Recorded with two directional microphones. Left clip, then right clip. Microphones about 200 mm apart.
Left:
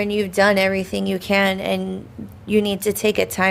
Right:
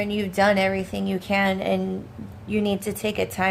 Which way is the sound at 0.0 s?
35° left (ahead or behind).